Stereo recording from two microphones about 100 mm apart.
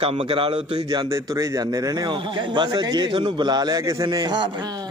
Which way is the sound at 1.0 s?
30° right (ahead or behind).